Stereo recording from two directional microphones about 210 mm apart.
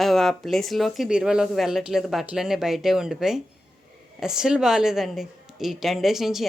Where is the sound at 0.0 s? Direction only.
Centre (ahead or behind).